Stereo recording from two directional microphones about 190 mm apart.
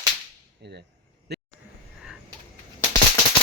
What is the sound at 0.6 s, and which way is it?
Speech, 60° right (ahead or behind).